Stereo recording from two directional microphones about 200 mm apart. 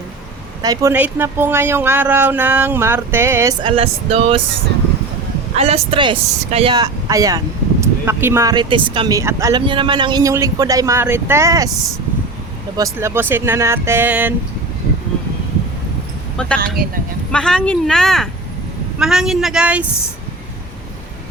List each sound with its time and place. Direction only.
0.6 s speech: 15° right (ahead or behind)
3.6 s speech: 25° right (ahead or behind)
5.5 s speech: 30° right (ahead or behind)
12.7 s speech: 15° right (ahead or behind)
17.3 s speech: 5° left (ahead or behind)